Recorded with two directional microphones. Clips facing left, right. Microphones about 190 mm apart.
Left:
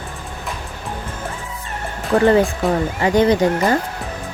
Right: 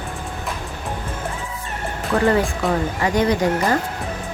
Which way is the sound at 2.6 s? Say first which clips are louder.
Left 2 dB; 25° left (ahead or behind).